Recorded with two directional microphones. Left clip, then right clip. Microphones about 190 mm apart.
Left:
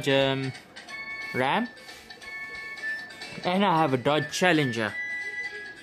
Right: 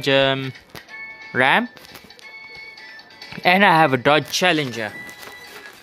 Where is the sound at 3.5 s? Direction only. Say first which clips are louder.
Right 10 dB; 15° right (ahead or behind); by 4.7 s centre (ahead or behind).